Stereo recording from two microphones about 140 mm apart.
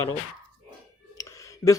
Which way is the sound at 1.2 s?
25° left (ahead or behind).